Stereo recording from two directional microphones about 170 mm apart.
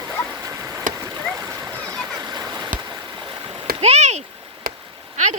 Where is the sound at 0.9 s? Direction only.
50° right (ahead or behind).